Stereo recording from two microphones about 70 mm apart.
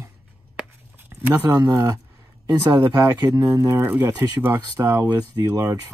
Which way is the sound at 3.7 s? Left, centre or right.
Right.